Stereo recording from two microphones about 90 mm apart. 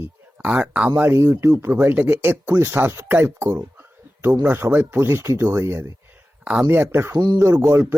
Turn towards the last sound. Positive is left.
turn(degrees=-30)  # may be behind; listen again after turning